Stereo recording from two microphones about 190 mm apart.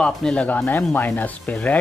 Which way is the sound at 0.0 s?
5° left (ahead or behind).